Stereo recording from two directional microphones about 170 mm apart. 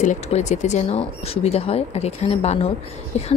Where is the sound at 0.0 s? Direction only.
45° left (ahead or behind).